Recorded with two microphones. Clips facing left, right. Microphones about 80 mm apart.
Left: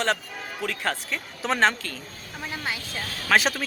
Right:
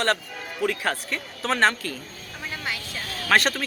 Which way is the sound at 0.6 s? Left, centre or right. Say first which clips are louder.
Right 4 dB; centre.